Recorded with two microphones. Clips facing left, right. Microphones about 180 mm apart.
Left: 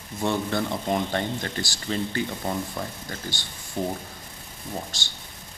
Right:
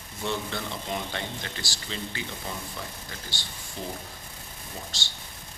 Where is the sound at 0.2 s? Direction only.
50° left (ahead or behind).